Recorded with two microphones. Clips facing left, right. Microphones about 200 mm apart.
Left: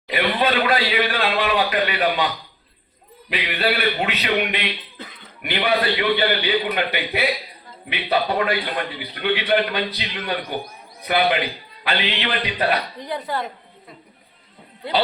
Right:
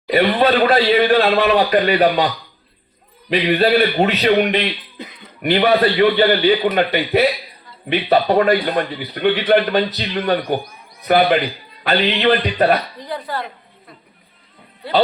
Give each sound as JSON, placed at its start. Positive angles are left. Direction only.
{"t": 0.1, "sound": "a man's voice", "side_deg": -40}
{"t": 5.0, "sound": "speech", "side_deg": -15}
{"t": 5.4, "sound": "a man's voice", "side_deg": -40}
{"t": 11.9, "sound": "a man's voice", "side_deg": -45}
{"t": 13.0, "sound": "speech", "side_deg": 20}